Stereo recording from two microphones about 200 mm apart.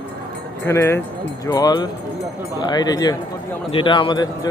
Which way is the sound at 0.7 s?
10° left (ahead or behind).